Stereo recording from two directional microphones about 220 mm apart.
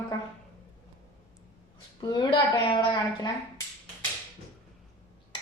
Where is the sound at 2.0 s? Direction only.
20° left (ahead or behind).